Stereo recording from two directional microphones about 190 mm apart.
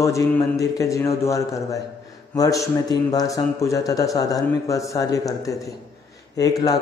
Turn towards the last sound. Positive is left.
turn(degrees=20)  # may be behind; listen again after turning